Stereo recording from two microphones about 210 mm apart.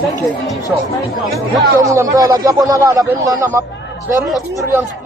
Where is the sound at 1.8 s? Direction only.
15° right (ahead or behind).